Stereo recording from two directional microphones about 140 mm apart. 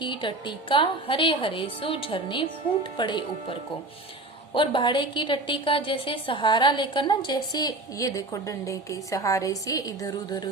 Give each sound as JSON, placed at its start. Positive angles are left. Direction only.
{"t": 0.0, "sound": "a woman's voice", "side_deg": 35}
{"t": 4.5, "sound": "a woman's voice", "side_deg": 35}